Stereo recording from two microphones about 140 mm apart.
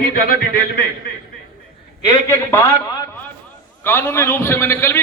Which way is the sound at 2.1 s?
20° left (ahead or behind).